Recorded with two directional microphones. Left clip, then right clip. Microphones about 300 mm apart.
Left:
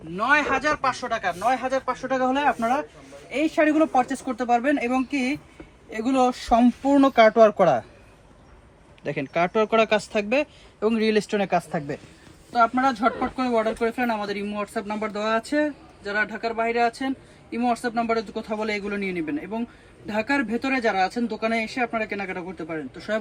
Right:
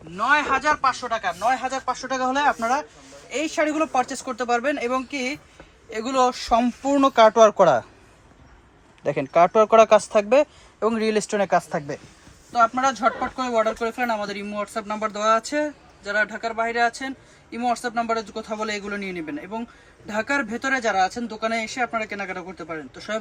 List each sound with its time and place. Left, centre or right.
0.2 s speech: centre
9.0 s speech: right
12.5 s speech: centre